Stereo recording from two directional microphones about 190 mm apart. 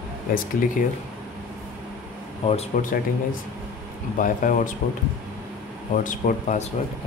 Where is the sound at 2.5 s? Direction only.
40° left (ahead or behind).